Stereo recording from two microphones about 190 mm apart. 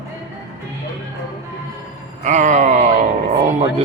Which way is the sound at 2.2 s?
40° right (ahead or behind).